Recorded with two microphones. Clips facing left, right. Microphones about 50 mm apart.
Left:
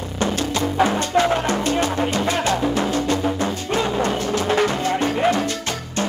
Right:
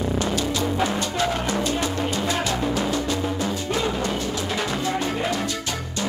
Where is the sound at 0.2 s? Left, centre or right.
Left.